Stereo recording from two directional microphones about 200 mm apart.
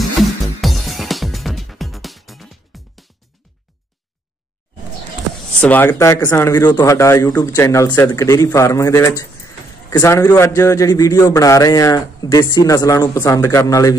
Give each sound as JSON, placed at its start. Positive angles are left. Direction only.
{"t": 0.2, "sound": "music", "side_deg": 0}
{"t": 5.6, "sound": "a man's voice", "side_deg": 10}